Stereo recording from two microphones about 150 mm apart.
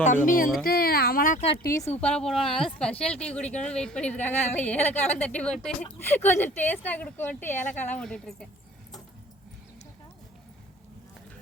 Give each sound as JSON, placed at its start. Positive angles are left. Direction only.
{"t": 0.0, "sound": "speech", "side_deg": 60}
{"t": 0.6, "sound": "speech", "side_deg": 90}
{"t": 1.7, "sound": "a woman's voice", "side_deg": 20}
{"t": 2.0, "sound": "a woman's voice", "side_deg": 5}